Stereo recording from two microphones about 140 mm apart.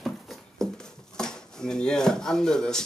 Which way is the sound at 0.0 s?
Centre (ahead or behind).